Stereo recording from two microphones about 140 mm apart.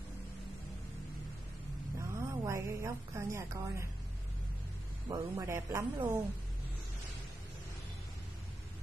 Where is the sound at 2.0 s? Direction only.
20° right (ahead or behind).